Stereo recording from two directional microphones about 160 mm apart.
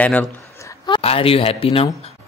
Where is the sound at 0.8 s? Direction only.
35° left (ahead or behind).